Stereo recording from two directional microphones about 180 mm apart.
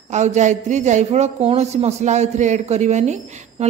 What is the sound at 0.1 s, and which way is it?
A woman's voice, 40° right (ahead or behind).